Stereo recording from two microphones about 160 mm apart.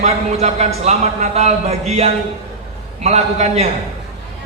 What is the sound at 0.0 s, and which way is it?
A man's voice, 45° right (ahead or behind).